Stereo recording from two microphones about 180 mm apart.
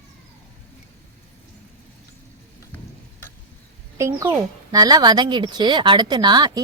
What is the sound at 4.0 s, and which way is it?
Speech, 15° right (ahead or behind).